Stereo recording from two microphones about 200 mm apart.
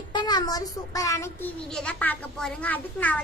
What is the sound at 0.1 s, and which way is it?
A child's voice, 20° left (ahead or behind).